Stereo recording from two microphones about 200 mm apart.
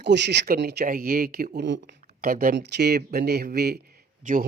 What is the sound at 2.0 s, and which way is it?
Speech, 45° right (ahead or behind).